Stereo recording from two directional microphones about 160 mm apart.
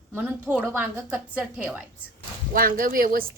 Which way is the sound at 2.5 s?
65° right (ahead or behind).